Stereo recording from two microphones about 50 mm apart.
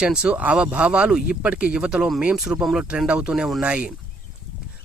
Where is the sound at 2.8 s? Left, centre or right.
Right.